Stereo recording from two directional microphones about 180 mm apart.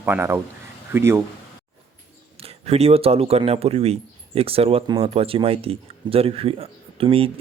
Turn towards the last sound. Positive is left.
turn(degrees=-30)  # may be behind; listen again after turning